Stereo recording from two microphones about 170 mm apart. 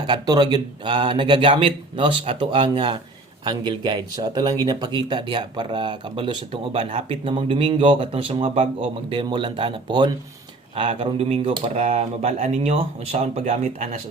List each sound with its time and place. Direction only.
0.0 s speech: 25° right (ahead or behind); by 14.0 s 45° right (ahead or behind)